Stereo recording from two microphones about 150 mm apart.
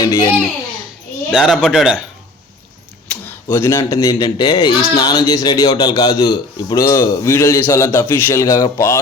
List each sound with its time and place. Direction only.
0.0 s a sound: 25° left (ahead or behind)
1.3 s speech: centre (ahead or behind)
3.1 s speech: 15° left (ahead or behind)